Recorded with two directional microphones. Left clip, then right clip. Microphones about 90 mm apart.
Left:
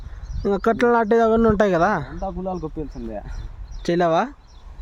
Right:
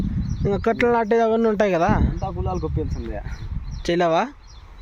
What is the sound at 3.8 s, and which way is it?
Speech, 20° left (ahead or behind).